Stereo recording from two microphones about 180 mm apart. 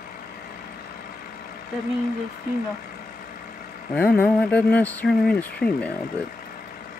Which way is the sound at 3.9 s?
10° left (ahead or behind).